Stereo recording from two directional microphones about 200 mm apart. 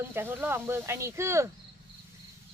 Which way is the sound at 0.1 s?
10° right (ahead or behind).